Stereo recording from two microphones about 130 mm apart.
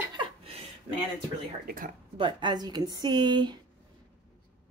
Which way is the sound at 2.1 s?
40° right (ahead or behind).